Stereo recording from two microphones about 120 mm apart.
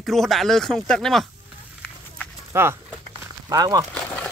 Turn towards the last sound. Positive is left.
turn(degrees=10)  # may be behind; listen again after turning